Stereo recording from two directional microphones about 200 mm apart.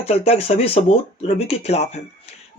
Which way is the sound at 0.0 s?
30° left (ahead or behind).